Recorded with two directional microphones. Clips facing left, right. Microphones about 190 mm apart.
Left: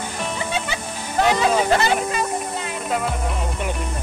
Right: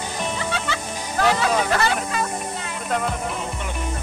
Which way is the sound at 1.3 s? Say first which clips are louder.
Left 3 dB; 20° left (ahead or behind).